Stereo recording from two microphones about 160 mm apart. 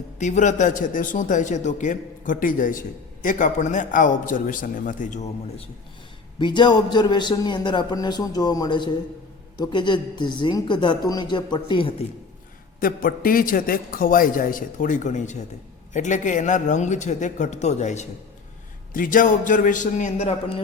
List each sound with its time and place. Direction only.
0.2 s a man's voice: 50° left (ahead or behind)
6.4 s a man's voice: 30° left (ahead or behind)
12.8 s a man's voice: 65° left (ahead or behind); by 18.0 s 45° left (ahead or behind)
18.9 s a man's voice: 60° left (ahead or behind)